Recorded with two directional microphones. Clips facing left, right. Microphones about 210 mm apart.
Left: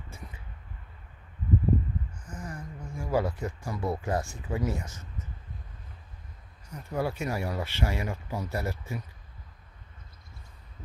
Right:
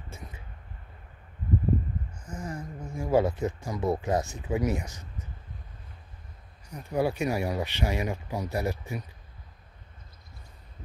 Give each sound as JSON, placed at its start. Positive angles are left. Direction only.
{"t": 2.2, "sound": "speech", "side_deg": -25}
{"t": 6.7, "sound": "speech", "side_deg": -15}